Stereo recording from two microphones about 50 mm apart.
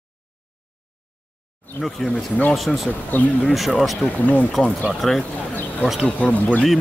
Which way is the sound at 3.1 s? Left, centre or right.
Left.